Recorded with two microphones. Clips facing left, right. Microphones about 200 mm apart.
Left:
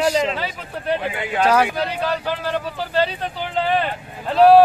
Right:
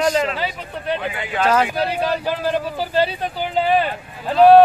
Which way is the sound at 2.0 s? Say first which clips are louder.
Right 2 dB; 15° right (ahead or behind).